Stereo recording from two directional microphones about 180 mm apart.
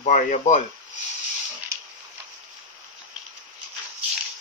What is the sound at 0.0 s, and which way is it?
Speech, 40° left (ahead or behind).